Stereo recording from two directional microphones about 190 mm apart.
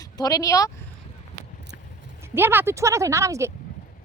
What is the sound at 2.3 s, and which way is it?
A woman's voice, 10° right (ahead or behind).